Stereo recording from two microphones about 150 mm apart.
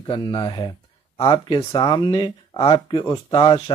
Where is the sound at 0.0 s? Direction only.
30° left (ahead or behind).